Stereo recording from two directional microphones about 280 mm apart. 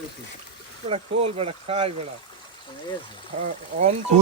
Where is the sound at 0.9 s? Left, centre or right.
Right.